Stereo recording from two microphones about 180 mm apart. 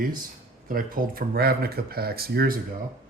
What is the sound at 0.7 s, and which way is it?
Speech, 50° right (ahead or behind).